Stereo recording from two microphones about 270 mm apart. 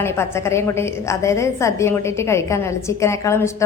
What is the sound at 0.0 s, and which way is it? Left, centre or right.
A woman's voice, centre.